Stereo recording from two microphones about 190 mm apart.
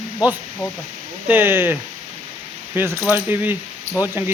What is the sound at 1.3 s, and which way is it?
Mechanisms, 10° right (ahead or behind).